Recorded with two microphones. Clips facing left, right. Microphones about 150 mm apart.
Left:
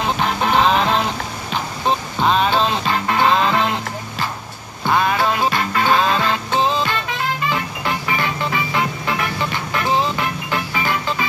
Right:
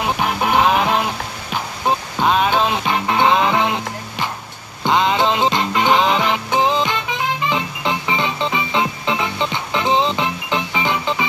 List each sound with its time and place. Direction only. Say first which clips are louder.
0.0 s music: even; 10° right (ahead or behind)